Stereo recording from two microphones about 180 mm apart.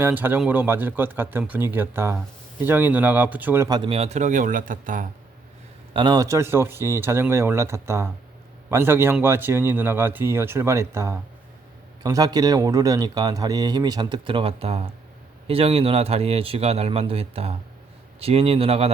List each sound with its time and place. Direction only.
0.0 s speech: 10° right (ahead or behind); by 5.0 s 50° right (ahead or behind)
5.9 s a man's voice: 25° right (ahead or behind)